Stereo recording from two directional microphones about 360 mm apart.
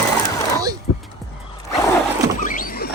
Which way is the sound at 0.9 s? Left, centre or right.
Left.